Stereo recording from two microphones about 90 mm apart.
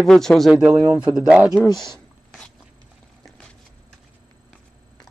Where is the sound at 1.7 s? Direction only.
50° left (ahead or behind).